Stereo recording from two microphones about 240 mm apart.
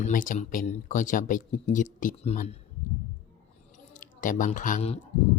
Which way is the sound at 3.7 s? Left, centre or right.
Left.